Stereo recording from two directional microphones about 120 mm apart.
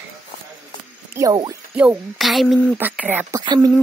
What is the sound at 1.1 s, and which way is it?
Speech, 30° right (ahead or behind).